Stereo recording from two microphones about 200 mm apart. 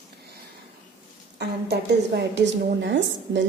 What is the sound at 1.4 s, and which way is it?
A woman's voice, 55° right (ahead or behind).